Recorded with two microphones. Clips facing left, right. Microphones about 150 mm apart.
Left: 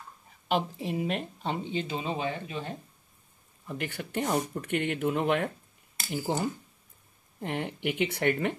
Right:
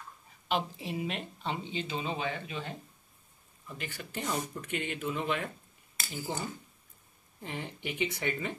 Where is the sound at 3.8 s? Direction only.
60° left (ahead or behind).